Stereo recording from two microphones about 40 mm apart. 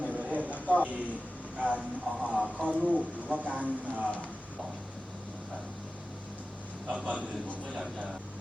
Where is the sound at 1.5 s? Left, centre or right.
Right.